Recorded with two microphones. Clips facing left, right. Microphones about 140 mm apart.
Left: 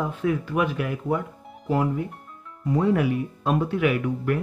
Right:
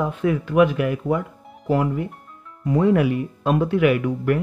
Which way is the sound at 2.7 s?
90° right.